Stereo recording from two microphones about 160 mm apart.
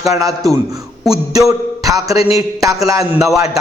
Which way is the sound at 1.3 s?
20° right (ahead or behind).